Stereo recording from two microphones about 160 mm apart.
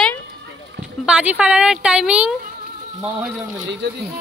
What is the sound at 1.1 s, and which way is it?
A woman's voice, 5° right (ahead or behind).